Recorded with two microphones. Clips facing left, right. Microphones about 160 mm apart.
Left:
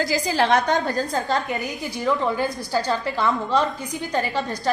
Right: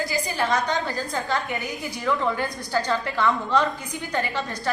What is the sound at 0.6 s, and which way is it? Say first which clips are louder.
A woman's voice: left 4 dB; 50° left (ahead or behind).